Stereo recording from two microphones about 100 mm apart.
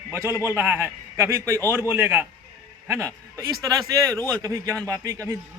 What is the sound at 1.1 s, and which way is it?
A man's voice, 30° right (ahead or behind).